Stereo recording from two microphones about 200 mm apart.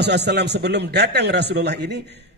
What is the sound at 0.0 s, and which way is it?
A man's voice, 55° right (ahead or behind).